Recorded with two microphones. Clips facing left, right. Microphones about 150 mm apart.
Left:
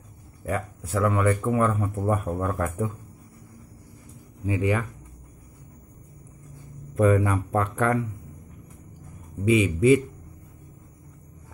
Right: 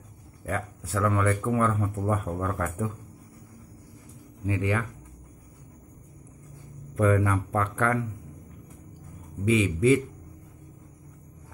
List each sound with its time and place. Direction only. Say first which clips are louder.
0.5 s speech: left 3 dB; 15° left (ahead or behind)
4.5 s speech: left 3 dB; 15° left (ahead or behind)
7.0 s speech: left 3 dB; 15° left (ahead or behind)
9.4 s speech: left 3 dB; 10° left (ahead or behind)